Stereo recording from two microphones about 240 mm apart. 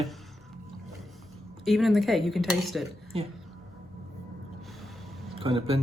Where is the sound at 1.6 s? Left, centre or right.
Centre.